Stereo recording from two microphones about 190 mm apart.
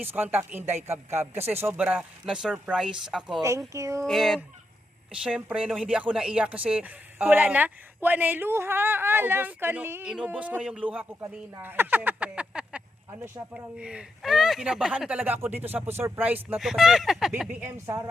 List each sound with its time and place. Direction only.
0.0 s speech: 10° right (ahead or behind)
3.7 s speech: 15° right (ahead or behind)
4.0 s speech: centre (ahead or behind); by 18.1 s 15° right (ahead or behind)